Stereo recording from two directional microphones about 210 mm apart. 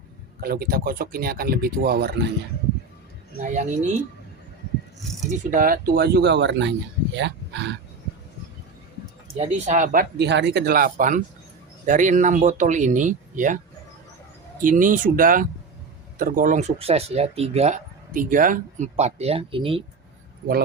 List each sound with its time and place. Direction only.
0.4 s speech: 45° right (ahead or behind)
3.4 s speech: 35° right (ahead or behind)
5.5 s speech: 40° right (ahead or behind)
9.4 s speech: 35° right (ahead or behind)
14.6 s speech: 40° right (ahead or behind)
20.4 s speech: 45° right (ahead or behind)